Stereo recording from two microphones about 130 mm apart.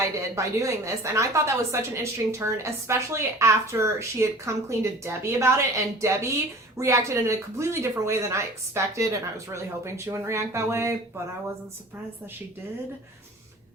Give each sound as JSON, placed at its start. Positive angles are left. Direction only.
{"t": 0.3, "sound": "a woman's voice", "side_deg": -25}